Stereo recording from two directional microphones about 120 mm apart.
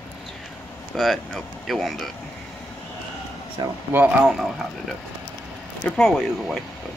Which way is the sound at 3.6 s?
40° right (ahead or behind).